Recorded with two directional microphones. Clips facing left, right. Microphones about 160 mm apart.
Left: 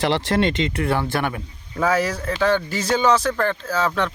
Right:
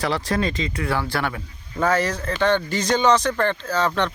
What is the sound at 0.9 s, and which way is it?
Speech, 20° left (ahead or behind).